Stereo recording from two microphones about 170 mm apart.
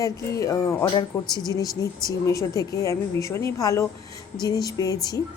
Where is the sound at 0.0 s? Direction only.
20° left (ahead or behind).